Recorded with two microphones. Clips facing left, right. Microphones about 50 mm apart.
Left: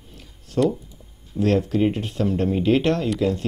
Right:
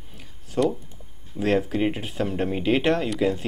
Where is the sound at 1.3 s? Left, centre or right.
Centre.